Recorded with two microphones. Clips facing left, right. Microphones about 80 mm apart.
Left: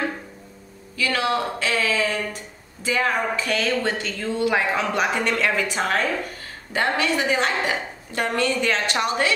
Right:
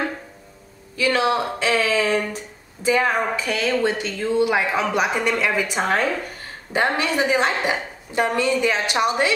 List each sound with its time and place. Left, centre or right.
0.9 s speech: right
5.8 s a woman's voice: right